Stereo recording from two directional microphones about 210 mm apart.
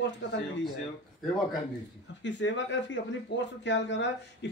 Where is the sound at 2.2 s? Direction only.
60° left (ahead or behind).